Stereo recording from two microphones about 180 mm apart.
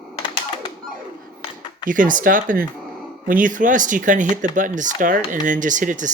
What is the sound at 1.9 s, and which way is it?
Speech, 45° right (ahead or behind).